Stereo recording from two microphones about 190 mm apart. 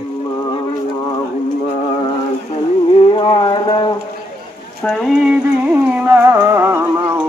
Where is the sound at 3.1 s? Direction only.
25° left (ahead or behind).